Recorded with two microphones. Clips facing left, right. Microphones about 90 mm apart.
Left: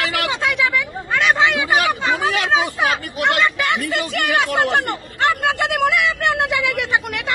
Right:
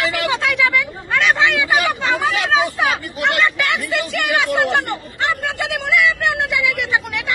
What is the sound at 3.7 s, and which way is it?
A man's voice, 45° left (ahead or behind).